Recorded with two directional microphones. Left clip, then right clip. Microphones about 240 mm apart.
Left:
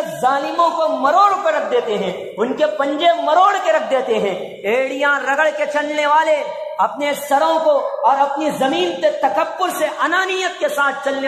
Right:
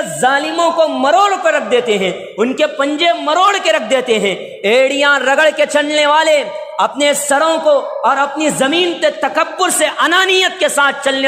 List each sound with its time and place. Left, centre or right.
0.2 s a man's voice: right